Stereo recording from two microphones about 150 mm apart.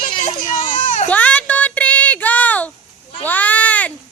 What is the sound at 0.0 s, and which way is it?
Children playing, 60° left (ahead or behind).